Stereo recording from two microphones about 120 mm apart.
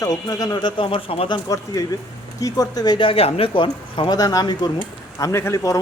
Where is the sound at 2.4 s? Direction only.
30° left (ahead or behind); by 3.6 s 50° left (ahead or behind).